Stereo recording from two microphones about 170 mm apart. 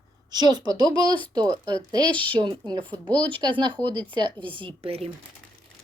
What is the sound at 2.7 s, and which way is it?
Speech, 10° left (ahead or behind).